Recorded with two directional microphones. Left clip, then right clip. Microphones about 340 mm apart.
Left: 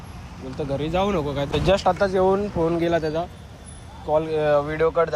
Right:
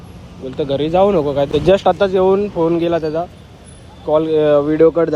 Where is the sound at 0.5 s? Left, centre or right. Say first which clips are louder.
Right 9 dB; right.